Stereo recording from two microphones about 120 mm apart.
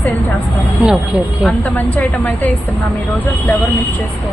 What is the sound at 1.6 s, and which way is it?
Speech, 15° left (ahead or behind).